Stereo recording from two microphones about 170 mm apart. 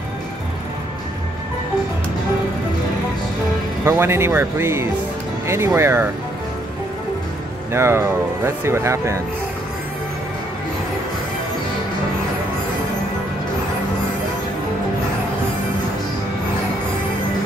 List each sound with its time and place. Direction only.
3.8 s speech: 15° right (ahead or behind)
7.7 s speech: 15° right (ahead or behind)